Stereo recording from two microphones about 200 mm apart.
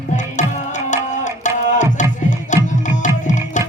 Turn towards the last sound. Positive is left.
turn(degrees=40)  # may be behind; listen again after turning